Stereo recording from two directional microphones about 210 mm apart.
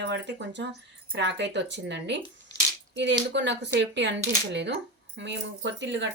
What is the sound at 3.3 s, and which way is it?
Speech, 55° right (ahead or behind).